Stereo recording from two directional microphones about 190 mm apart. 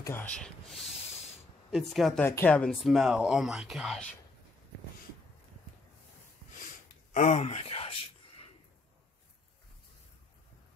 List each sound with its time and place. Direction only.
0.0 s speech: 10° left (ahead or behind)
7.2 s speech: 35° left (ahead or behind)